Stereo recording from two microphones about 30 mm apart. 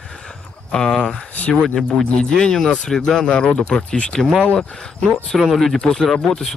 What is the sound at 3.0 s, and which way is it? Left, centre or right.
Speech, left.